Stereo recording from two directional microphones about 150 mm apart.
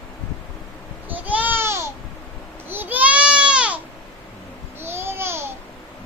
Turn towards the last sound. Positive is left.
turn(degrees=-15)  # may be behind; listen again after turning